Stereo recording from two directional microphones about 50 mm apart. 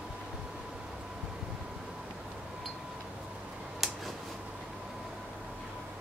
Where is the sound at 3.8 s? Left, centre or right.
Centre.